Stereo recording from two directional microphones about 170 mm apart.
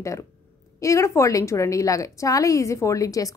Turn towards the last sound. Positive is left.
turn(degrees=20)  # may be behind; listen again after turning